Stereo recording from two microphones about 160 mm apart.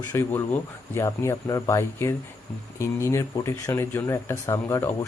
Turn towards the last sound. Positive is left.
turn(degrees=15)  # may be behind; listen again after turning